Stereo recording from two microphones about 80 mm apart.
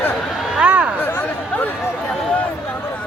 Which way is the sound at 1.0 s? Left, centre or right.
Left.